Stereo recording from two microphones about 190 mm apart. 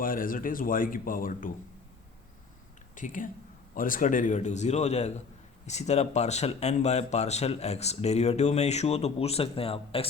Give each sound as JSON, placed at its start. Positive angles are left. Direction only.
{"t": 0.0, "sound": "speech", "side_deg": 45}
{"t": 2.9, "sound": "speech", "side_deg": 45}